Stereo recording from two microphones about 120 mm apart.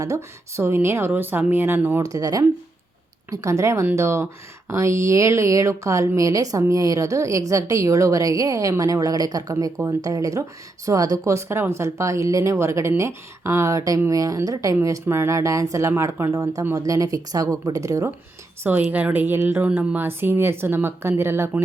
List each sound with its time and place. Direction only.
0.0 s speech: 25° right (ahead or behind)
2.0 s speech: 30° right (ahead or behind)
18.6 s speech: 15° right (ahead or behind)